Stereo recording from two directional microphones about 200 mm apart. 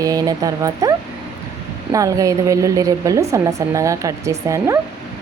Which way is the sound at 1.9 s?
15° right (ahead or behind).